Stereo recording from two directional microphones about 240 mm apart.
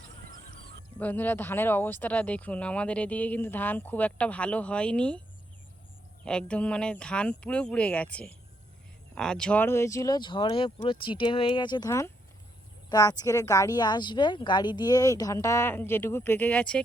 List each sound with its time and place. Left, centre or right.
0.9 s speech: centre
6.2 s speech: centre